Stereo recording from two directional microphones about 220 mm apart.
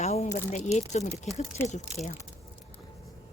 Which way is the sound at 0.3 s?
30° left (ahead or behind).